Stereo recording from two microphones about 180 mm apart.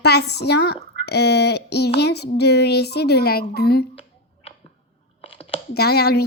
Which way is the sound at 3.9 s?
35° left (ahead or behind).